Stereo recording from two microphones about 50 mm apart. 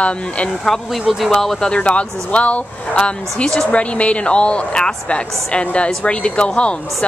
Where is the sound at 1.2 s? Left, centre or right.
Centre.